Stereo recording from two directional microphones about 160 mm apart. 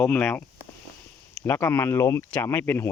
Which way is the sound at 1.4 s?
15° left (ahead or behind).